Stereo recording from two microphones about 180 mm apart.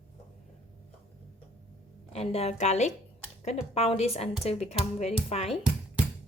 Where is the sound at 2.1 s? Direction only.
35° left (ahead or behind).